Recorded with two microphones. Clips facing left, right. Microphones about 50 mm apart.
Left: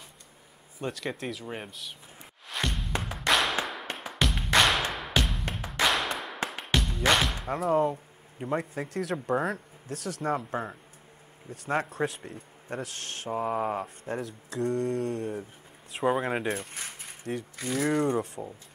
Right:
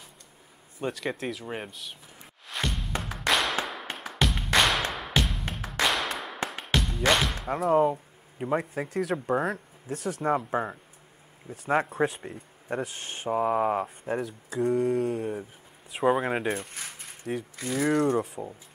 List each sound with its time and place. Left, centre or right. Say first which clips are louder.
0.7 s speech: right 2 dB; centre
3.3 s music: even; centre
6.7 s speech: right 1 dB; centre